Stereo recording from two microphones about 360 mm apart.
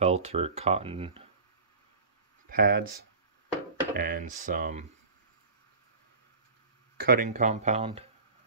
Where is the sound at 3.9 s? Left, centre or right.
Right.